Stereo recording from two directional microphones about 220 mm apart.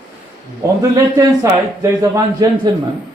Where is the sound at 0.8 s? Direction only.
15° right (ahead or behind).